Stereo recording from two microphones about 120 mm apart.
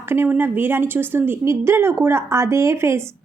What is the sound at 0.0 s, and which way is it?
A woman's voice, 20° right (ahead or behind).